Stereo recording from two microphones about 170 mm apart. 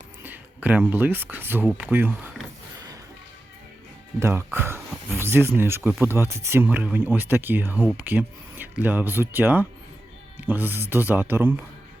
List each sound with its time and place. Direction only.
0.2 s speech: 10° right (ahead or behind)
4.2 s speech: 15° right (ahead or behind)